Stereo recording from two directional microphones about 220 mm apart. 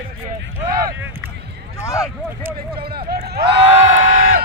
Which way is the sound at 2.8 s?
45° right (ahead or behind).